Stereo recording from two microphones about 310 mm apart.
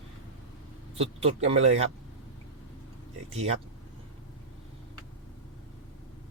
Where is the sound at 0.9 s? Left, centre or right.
Centre.